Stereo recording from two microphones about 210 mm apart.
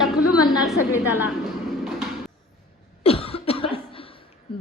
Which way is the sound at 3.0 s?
25° left (ahead or behind).